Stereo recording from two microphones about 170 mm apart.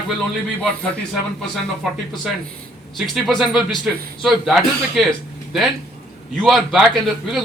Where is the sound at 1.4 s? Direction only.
Centre (ahead or behind).